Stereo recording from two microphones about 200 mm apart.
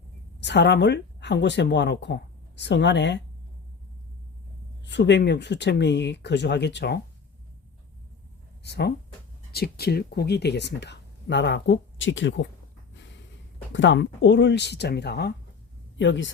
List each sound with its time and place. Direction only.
0.3 s speech: 60° left (ahead or behind)
4.9 s speech: 60° left (ahead or behind)
8.6 s speech: 55° left (ahead or behind)
13.7 s speech: 65° left (ahead or behind)